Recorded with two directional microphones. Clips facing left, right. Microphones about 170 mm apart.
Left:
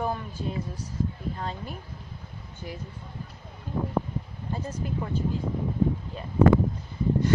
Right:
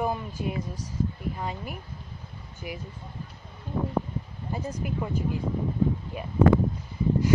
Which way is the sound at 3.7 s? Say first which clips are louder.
Even; 5° left (ahead or behind).